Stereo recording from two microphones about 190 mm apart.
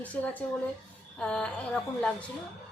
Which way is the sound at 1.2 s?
5° left (ahead or behind).